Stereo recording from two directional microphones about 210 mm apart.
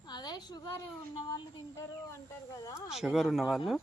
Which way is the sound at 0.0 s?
20° left (ahead or behind).